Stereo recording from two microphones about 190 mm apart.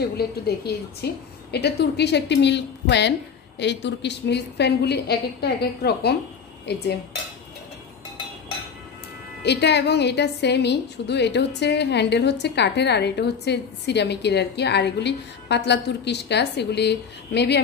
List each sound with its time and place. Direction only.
0.7 s a woman's voice: 60° left (ahead or behind)
9.4 s a woman's voice: 65° left (ahead or behind)